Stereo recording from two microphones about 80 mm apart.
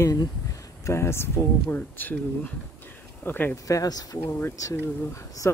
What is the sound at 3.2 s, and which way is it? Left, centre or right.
Speech, left.